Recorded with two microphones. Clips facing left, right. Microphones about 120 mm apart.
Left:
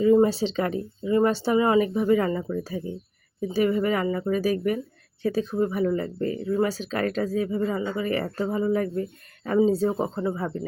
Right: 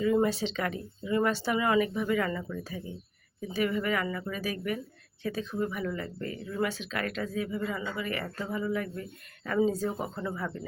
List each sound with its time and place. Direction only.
0.0 s speech: 30° left (ahead or behind)